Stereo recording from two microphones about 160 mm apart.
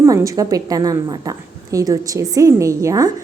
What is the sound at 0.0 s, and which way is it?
A woman's voice, 20° right (ahead or behind).